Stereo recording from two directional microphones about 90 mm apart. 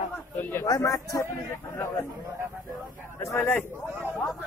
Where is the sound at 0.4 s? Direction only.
25° left (ahead or behind).